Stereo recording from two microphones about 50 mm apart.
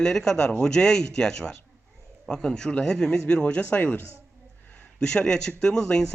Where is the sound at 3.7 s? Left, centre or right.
Left.